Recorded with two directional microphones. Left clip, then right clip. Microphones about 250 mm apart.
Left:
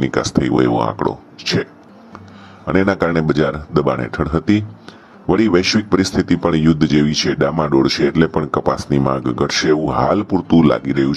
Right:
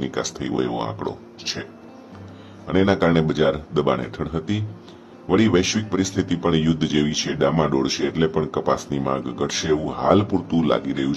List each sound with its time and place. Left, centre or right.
0.0 s speech: left
2.6 s speech: left